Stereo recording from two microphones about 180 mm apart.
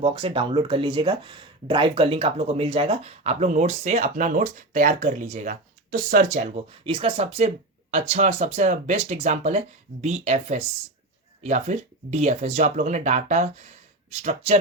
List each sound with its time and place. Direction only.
0.0 s speech: 30° right (ahead or behind)